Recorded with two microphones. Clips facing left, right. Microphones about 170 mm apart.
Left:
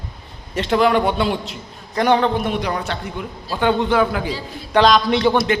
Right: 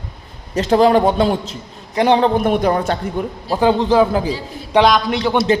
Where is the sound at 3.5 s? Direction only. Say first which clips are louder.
Right 3 dB; 30° right (ahead or behind).